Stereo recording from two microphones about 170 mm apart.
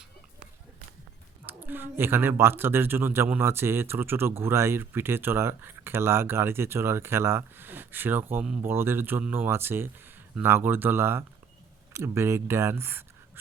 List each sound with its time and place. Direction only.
1.5 s a woman's voice: 10° right (ahead or behind)